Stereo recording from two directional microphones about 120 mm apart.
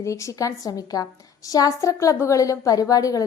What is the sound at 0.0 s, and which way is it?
A woman's voice, 25° left (ahead or behind).